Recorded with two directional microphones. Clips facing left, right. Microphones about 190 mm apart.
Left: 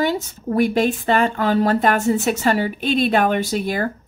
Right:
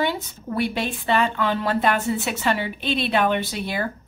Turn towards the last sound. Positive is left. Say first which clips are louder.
# left 5 dB
turn(degrees=45)  # may be behind; listen again after turning